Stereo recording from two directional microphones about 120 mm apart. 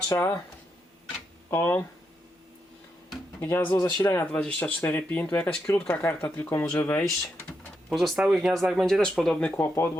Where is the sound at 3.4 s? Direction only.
20° left (ahead or behind).